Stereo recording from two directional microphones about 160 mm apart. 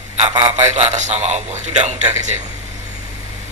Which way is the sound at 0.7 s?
45° right (ahead or behind).